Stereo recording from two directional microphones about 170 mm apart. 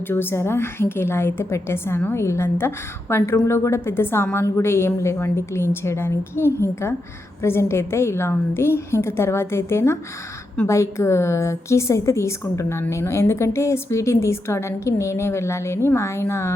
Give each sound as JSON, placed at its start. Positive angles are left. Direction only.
{"t": 0.1, "sound": "a woman's voice", "side_deg": 15}